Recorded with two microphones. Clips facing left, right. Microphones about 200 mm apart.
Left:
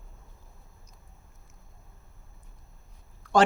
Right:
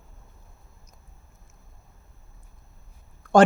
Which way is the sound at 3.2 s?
50° right (ahead or behind).